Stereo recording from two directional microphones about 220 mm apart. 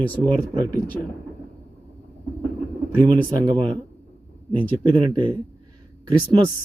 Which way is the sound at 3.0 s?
20° right (ahead or behind).